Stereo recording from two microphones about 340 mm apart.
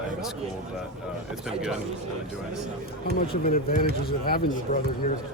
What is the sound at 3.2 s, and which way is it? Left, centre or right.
Speech, centre.